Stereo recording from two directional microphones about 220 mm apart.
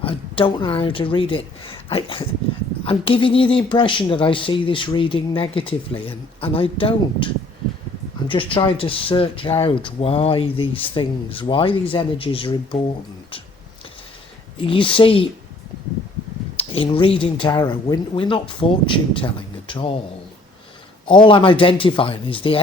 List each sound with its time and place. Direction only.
0.0 s speech: 25° left (ahead or behind)
8.3 s speech: 25° left (ahead or behind)
14.7 s speech: 25° left (ahead or behind)
16.6 s speech: 25° left (ahead or behind)
21.1 s speech: 20° left (ahead or behind)